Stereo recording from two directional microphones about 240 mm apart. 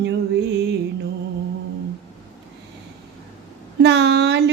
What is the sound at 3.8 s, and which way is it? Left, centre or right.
Mantra, right.